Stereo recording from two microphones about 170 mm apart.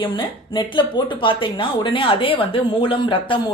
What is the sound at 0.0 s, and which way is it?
Speech, 30° left (ahead or behind).